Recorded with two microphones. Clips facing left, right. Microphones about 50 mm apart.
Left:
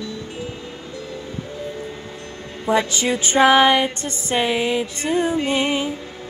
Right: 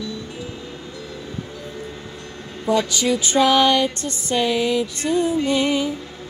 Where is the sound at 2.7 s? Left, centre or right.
Left.